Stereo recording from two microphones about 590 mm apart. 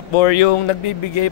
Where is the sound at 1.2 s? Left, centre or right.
Left.